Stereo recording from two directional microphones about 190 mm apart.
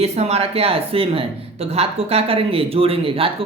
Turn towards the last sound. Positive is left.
turn(degrees=-30)  # may be behind; listen again after turning